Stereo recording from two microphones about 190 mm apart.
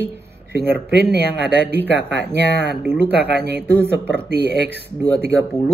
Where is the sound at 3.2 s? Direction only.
60° right (ahead or behind).